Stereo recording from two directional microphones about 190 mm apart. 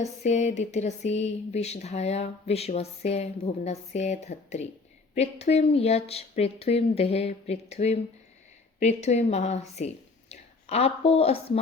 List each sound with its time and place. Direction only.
0.0 s speech: 35° left (ahead or behind)